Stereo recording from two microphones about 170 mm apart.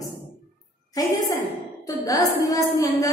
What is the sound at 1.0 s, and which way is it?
A woman's voice, 20° left (ahead or behind).